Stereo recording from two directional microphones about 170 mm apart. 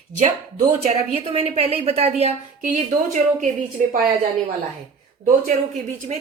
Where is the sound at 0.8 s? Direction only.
35° right (ahead or behind).